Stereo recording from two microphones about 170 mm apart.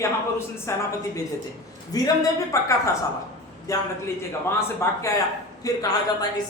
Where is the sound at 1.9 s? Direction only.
20° left (ahead or behind).